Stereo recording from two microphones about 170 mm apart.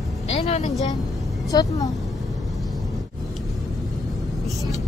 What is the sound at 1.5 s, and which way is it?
Speech, 20° left (ahead or behind).